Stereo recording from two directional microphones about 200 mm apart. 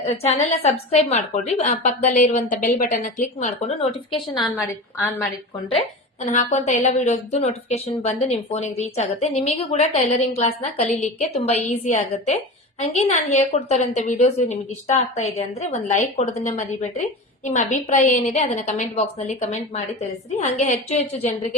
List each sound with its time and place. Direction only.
0.0 s a woman's voice: 30° left (ahead or behind)
4.1 s a woman's voice: centre (ahead or behind)
6.2 s a woman's voice: 35° left (ahead or behind)